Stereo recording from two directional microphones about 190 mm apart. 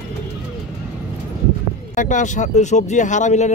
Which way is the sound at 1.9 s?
40° left (ahead or behind).